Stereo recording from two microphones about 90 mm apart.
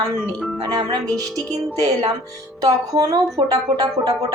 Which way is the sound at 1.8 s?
40° right (ahead or behind).